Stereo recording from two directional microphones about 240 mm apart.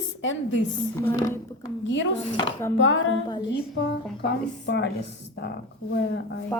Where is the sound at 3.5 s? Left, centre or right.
Left.